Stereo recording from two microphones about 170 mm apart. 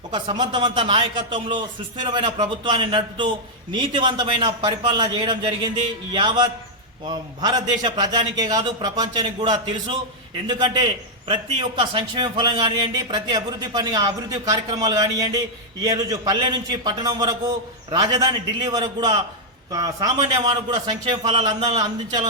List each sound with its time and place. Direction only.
0.1 s a man's voice: 25° right (ahead or behind)